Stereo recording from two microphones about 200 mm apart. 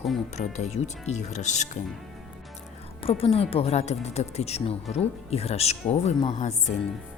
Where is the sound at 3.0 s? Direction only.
25° left (ahead or behind).